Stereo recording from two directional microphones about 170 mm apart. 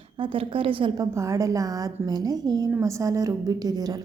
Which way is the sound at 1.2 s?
20° right (ahead or behind).